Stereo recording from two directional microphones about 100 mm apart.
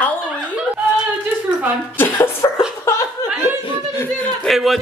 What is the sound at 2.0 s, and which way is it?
Cough, 20° left (ahead or behind).